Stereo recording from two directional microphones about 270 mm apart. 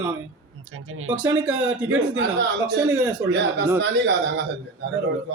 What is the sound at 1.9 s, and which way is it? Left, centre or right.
Speech, right.